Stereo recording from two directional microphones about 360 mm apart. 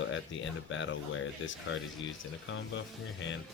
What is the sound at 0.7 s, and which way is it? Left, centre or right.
Speech, left.